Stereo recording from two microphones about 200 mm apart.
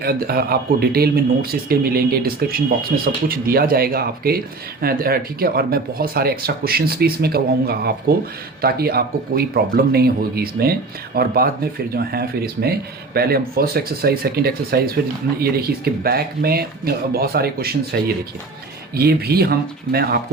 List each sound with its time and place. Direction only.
0.0 s speech: 50° right (ahead or behind)